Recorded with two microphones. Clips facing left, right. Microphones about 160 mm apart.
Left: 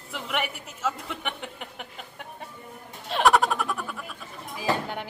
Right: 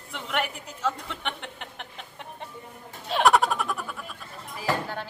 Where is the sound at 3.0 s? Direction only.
Centre (ahead or behind).